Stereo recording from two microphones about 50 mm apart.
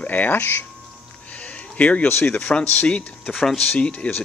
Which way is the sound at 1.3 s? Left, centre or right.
Left.